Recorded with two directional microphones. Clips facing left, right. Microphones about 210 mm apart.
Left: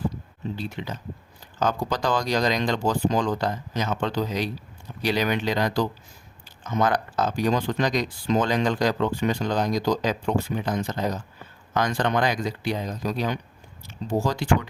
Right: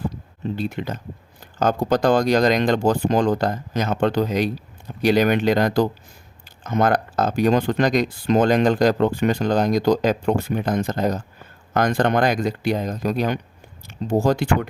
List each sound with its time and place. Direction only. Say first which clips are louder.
0.5 s speech: right 7 dB; 50° right (ahead or behind)